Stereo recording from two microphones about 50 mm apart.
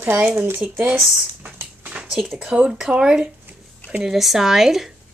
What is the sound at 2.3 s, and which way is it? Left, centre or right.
Speech, right.